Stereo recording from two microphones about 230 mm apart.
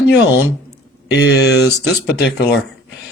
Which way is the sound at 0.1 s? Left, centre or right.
Left.